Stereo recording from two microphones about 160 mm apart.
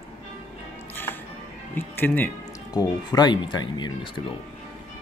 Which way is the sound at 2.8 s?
25° left (ahead or behind).